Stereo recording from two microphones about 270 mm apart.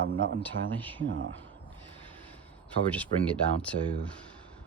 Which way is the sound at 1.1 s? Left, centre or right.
Right.